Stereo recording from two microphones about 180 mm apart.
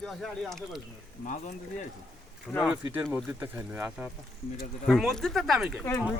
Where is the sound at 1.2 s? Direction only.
45° left (ahead or behind).